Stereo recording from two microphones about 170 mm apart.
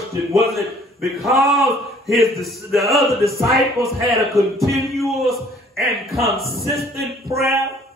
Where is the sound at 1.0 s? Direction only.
Centre (ahead or behind).